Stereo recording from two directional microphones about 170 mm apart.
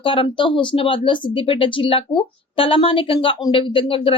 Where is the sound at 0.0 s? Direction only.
30° left (ahead or behind).